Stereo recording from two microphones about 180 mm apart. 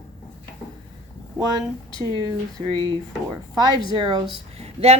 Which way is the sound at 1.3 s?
20° right (ahead or behind).